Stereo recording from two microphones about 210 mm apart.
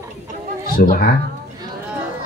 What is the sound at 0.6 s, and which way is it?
Speech, 40° left (ahead or behind).